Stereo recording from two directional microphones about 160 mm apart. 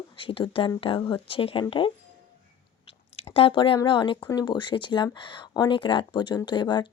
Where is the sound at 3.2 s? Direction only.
35° left (ahead or behind).